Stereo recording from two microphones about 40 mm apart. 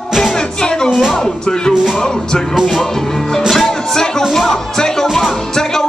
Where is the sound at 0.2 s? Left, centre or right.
Centre.